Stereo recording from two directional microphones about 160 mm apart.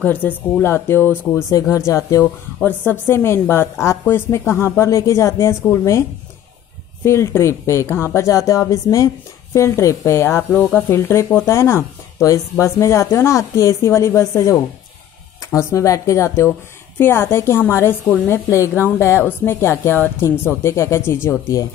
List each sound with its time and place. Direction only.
0.0 s a woman's voice: 10° left (ahead or behind)
7.1 s a woman's voice: 20° left (ahead or behind)